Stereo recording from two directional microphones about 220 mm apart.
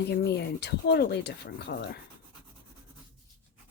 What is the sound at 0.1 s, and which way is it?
Speech, 50° left (ahead or behind).